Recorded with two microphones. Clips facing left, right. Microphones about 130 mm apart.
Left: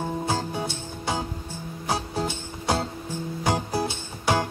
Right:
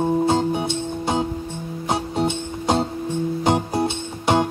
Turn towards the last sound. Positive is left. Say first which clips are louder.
# right 5 dB
turn(degrees=-20)  # may be behind; listen again after turning